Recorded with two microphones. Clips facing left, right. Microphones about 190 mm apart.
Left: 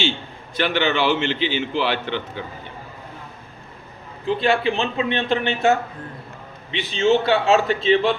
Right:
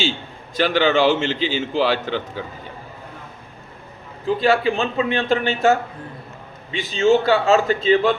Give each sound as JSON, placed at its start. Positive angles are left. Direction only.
{"t": 0.6, "sound": "a man's voice", "side_deg": -45}
{"t": 4.3, "sound": "a man's voice", "side_deg": -40}
{"t": 6.7, "sound": "a man's voice", "side_deg": -45}